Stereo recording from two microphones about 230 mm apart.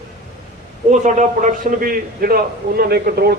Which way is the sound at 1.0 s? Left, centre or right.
Right.